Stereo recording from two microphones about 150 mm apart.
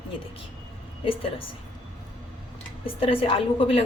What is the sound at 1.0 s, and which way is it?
Speech, 35° left (ahead or behind).